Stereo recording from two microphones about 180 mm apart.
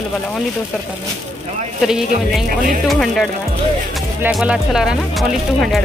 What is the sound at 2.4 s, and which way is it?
Speech, 50° right (ahead or behind).